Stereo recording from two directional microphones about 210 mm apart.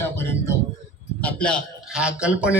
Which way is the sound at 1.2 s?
5° left (ahead or behind).